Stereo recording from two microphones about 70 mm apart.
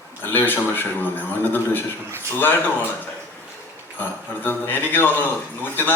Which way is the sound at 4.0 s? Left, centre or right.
Left.